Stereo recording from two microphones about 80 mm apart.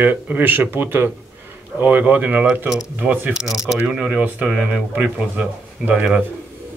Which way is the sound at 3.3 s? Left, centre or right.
Centre.